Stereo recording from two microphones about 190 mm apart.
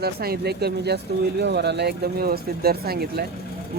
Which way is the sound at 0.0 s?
55° right (ahead or behind).